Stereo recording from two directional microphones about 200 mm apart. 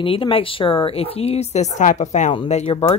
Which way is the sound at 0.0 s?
25° left (ahead or behind).